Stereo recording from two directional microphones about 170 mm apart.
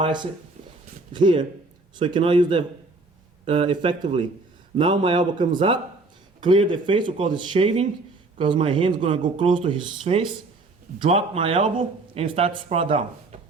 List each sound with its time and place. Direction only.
0.0 s speech: 25° right (ahead or behind)